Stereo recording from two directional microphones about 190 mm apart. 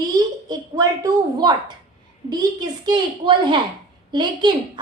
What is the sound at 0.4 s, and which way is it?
A woman's voice, 20° right (ahead or behind).